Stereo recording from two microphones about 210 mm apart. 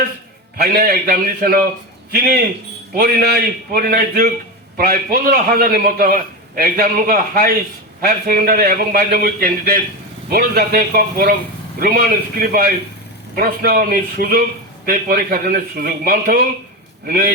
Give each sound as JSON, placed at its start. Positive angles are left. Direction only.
{"t": 0.6, "sound": "a man's voice", "side_deg": -45}